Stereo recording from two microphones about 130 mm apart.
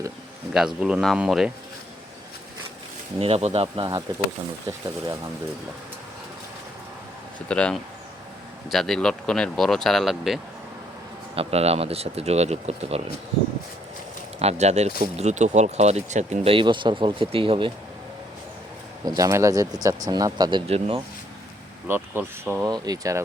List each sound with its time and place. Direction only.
0.5 s speech: 5° right (ahead or behind)
3.2 s speech: 50° right (ahead or behind)
7.3 s speech: 10° left (ahead or behind)
11.3 s speech: 50° right (ahead or behind)
14.3 s speech: 55° right (ahead or behind)
19.0 s speech: 25° right (ahead or behind)
20.7 s speech: 50° right (ahead or behind)
21.8 s speech: 15° right (ahead or behind)
22.6 s speech: 30° right (ahead or behind)